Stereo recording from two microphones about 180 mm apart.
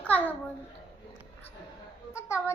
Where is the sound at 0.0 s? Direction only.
10° left (ahead or behind).